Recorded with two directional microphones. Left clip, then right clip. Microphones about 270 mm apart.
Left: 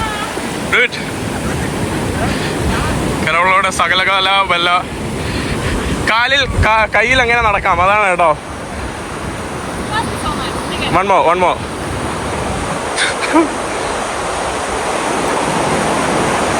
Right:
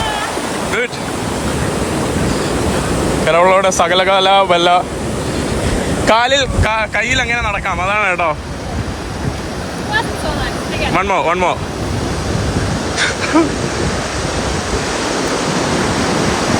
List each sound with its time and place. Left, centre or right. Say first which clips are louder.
3.2 s speech: right 1 dB; centre
6.1 s speech: right 1 dB; centre
10.9 s speech: left 4 dB; centre